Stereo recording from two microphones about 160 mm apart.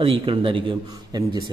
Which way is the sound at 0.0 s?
35° right (ahead or behind).